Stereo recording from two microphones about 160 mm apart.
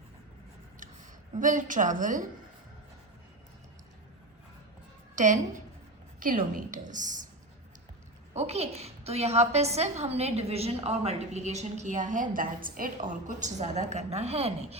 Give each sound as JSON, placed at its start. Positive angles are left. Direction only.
{"t": 1.4, "sound": "a woman's voice", "side_deg": -55}
{"t": 5.1, "sound": "a woman's voice", "side_deg": -50}
{"t": 8.3, "sound": "a woman's voice", "side_deg": -40}